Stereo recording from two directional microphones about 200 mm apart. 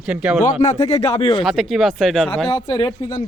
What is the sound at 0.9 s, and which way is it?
Speech, 30° left (ahead or behind).